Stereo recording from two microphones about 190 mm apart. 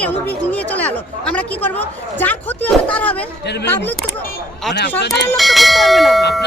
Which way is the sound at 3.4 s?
60° left (ahead or behind).